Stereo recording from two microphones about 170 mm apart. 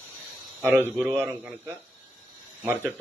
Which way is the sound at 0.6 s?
15° right (ahead or behind).